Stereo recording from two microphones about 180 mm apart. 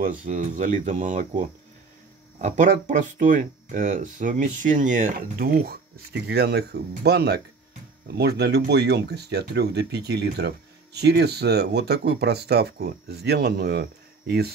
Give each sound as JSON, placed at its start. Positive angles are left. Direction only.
{"t": 0.2, "sound": "speech", "side_deg": -45}